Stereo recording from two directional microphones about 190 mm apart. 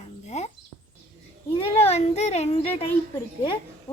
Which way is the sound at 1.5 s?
30° left (ahead or behind).